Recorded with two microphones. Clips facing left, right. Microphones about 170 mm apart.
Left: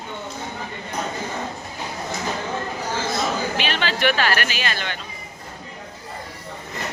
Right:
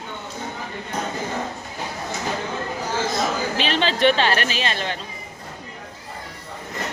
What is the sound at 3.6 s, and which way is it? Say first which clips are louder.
A woman's voice: right 7 dB; 30° right (ahead or behind).